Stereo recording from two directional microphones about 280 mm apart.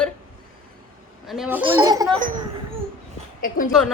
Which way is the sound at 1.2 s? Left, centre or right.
Centre.